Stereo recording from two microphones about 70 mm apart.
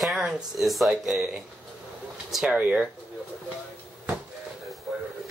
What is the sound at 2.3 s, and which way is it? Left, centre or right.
Speech, centre.